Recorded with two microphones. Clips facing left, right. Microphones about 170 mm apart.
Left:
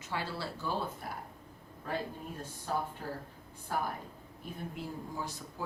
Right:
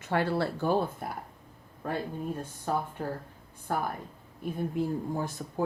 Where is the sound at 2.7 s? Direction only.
55° right (ahead or behind).